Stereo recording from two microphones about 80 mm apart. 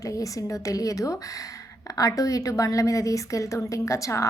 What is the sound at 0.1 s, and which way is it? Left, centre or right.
A woman's voice, left.